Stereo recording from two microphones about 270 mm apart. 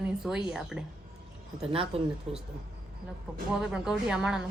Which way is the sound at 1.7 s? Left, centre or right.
Right.